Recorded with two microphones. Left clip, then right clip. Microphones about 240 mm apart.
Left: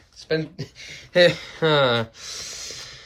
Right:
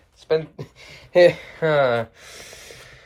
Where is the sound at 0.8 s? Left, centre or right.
Centre.